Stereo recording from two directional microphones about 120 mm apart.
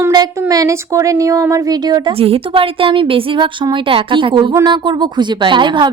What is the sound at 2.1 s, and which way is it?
A woman's voice, 50° right (ahead or behind).